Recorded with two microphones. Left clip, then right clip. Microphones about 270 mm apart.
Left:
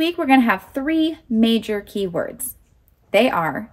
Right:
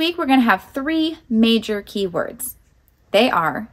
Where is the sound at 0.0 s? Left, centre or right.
Centre.